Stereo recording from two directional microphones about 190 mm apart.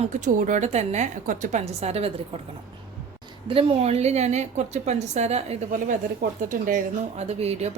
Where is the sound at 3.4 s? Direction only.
30° right (ahead or behind).